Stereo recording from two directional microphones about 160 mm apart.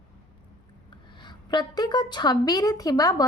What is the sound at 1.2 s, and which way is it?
A woman's voice, 30° left (ahead or behind).